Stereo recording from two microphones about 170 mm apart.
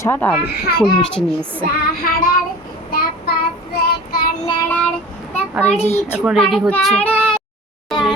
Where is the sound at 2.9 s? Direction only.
60° left (ahead or behind).